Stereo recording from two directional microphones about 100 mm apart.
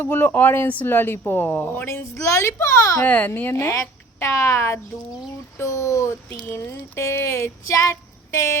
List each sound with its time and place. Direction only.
0.0 s a child's voice: 20° left (ahead or behind)
3.1 s speech: 15° left (ahead or behind)